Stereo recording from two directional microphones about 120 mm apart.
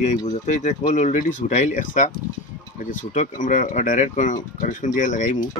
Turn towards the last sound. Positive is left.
turn(degrees=90)